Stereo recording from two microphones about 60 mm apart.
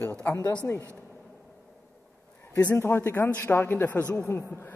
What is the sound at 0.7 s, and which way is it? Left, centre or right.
Speech, left.